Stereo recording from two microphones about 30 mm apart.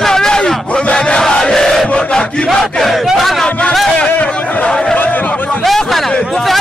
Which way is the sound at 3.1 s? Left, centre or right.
Centre.